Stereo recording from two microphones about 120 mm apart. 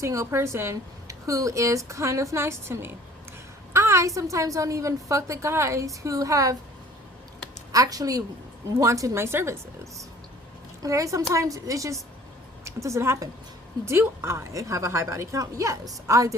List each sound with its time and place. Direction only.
0.0 s a woman's voice: 25° right (ahead or behind)
7.7 s a woman's voice: 30° right (ahead or behind)
10.8 s a woman's voice: 25° right (ahead or behind)